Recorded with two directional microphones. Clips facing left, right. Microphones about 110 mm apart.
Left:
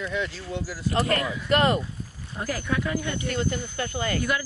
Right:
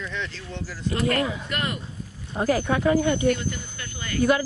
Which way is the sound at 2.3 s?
25° right (ahead or behind).